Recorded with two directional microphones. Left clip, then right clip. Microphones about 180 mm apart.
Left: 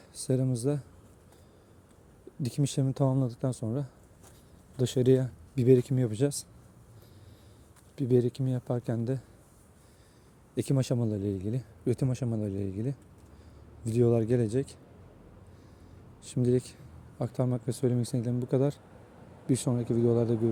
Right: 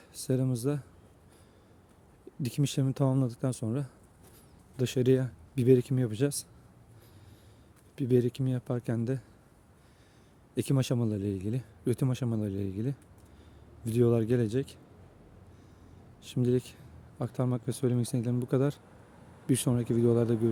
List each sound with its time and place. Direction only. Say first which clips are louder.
0.1 s speech: left 1 dB; 10° right (ahead or behind)
2.4 s speech: even; 15° right (ahead or behind)
4.8 s speech: left 2 dB; 10° right (ahead or behind)
7.9 s speech: left 1 dB; 15° right (ahead or behind)
10.5 s speech: left 1 dB; 15° right (ahead or behind)
16.2 s speech: left 1 dB; 10° right (ahead or behind)